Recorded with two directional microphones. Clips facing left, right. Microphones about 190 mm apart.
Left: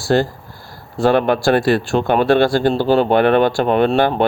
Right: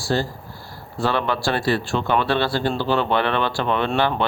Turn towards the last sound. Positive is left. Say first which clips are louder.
# left 7 dB
turn(degrees=45)  # may be behind; listen again after turning